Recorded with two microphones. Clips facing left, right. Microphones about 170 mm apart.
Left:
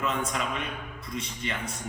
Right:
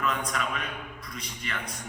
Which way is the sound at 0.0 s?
25° left (ahead or behind).